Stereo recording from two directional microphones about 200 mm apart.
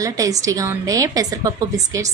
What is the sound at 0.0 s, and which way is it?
A woman's voice, 15° right (ahead or behind).